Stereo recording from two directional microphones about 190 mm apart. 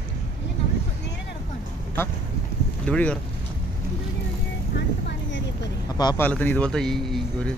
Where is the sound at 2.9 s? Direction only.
5° left (ahead or behind).